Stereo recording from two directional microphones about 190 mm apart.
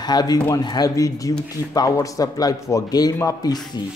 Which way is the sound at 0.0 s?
20° left (ahead or behind).